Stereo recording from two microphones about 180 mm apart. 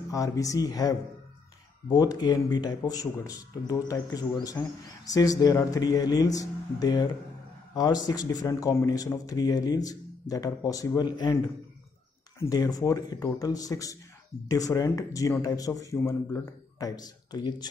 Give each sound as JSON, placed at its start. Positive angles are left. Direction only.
{"t": 0.1, "sound": "a man's voice", "side_deg": 20}
{"t": 12.4, "sound": "speech", "side_deg": 20}